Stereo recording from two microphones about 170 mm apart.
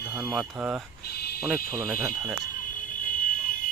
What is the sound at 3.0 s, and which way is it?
Fire alarm, 55° left (ahead or behind).